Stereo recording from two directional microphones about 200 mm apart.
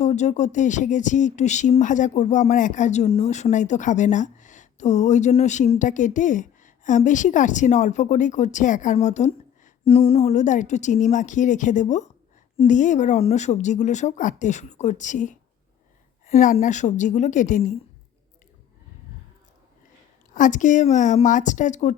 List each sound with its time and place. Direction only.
0.0 s speech: 35° left (ahead or behind)
20.3 s speech: 40° left (ahead or behind)